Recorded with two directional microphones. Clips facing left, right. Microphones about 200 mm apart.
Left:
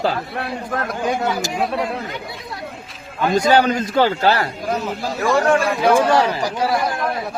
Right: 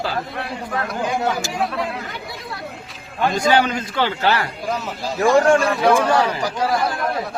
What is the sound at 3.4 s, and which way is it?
A man's voice, 40° left (ahead or behind).